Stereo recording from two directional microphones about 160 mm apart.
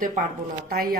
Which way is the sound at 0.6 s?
70° right (ahead or behind).